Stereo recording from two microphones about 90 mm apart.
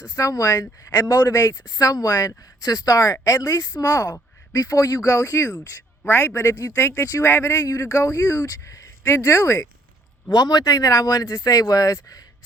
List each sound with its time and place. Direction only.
0.2 s speech: 40° left (ahead or behind)
1.7 s speech: 40° left (ahead or behind)
10.2 s speech: 45° left (ahead or behind)